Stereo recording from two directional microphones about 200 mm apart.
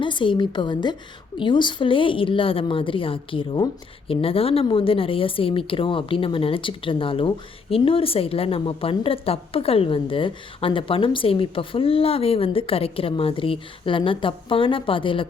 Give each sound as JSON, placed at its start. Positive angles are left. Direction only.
{"t": 0.0, "sound": "a woman's voice", "side_deg": 25}